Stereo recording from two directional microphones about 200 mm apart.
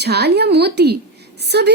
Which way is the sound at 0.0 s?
55° right (ahead or behind).